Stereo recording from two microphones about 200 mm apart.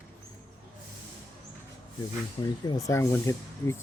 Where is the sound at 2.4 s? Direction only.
20° left (ahead or behind).